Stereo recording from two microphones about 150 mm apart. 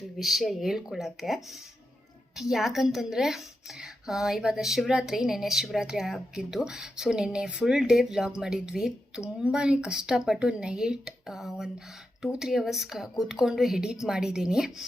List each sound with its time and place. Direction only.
0.2 s speech: centre (ahead or behind)